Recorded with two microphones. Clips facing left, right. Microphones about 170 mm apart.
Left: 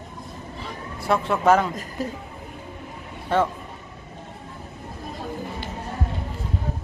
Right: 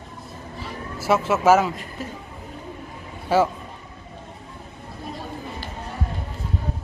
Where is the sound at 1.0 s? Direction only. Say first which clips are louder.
Right 2 dB; 5° right (ahead or behind).